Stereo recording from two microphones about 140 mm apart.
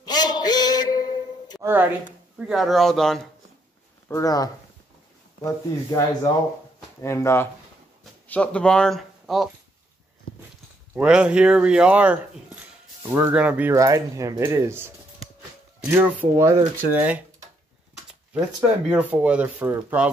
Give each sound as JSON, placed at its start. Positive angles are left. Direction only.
{"t": 0.0, "sound": "a sound", "side_deg": 30}
{"t": 1.6, "sound": "speech", "side_deg": -15}
{"t": 4.1, "sound": "speech", "side_deg": 25}
{"t": 8.3, "sound": "speech", "side_deg": 10}
{"t": 11.0, "sound": "speech", "side_deg": -5}
{"t": 13.7, "sound": "speech", "side_deg": -25}
{"t": 15.9, "sound": "speech", "side_deg": -15}
{"t": 18.9, "sound": "speech", "side_deg": -10}